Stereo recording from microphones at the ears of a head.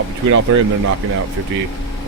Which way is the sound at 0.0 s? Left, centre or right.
Right.